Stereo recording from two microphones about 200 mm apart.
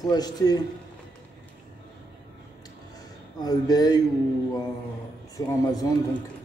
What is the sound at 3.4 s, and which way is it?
Speech, 20° left (ahead or behind).